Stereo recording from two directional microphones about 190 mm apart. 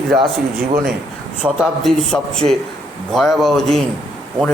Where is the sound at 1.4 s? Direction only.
Centre (ahead or behind).